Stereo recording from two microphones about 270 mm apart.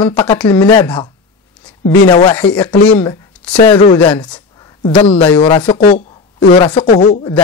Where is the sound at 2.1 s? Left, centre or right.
Centre.